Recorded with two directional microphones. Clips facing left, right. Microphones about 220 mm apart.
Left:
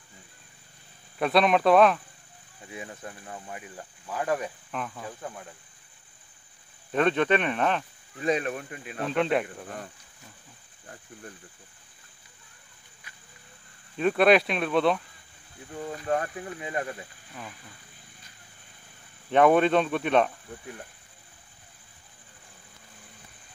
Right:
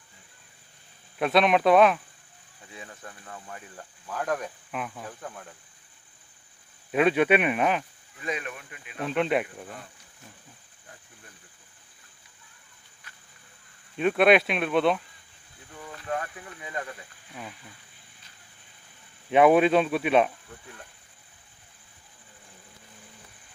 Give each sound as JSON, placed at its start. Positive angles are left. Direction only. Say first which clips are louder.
{"t": 1.1, "sound": "speech", "louder": "even", "side_deg": 0}
{"t": 2.7, "sound": "speech", "louder": "left 5 dB", "side_deg": 20}
{"t": 4.6, "sound": "speech", "louder": "even", "side_deg": -5}
{"t": 5.2, "sound": "speech", "louder": "left 1 dB", "side_deg": 5}
{"t": 6.9, "sound": "speech", "louder": "right 2 dB", "side_deg": -5}
{"t": 8.2, "sound": "speech", "louder": "left 7 dB", "side_deg": 35}
{"t": 9.1, "sound": "speech", "louder": "even", "side_deg": 0}
{"t": 13.9, "sound": "speech", "louder": "even", "side_deg": 0}
{"t": 15.7, "sound": "speech", "louder": "left 5 dB", "side_deg": 35}
{"t": 19.3, "sound": "speech", "louder": "right 1 dB", "side_deg": -5}